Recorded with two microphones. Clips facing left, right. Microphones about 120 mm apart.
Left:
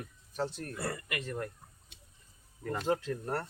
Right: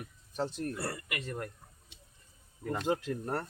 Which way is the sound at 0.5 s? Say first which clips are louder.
Right 2 dB; 15° right (ahead or behind).